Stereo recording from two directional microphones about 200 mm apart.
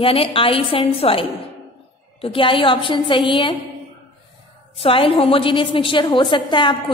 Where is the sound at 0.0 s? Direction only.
25° left (ahead or behind).